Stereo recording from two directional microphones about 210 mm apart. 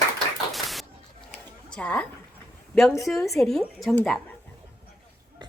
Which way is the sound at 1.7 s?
5° left (ahead or behind).